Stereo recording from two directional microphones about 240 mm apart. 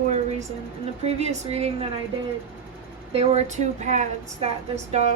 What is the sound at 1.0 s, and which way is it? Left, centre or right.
Speech, right.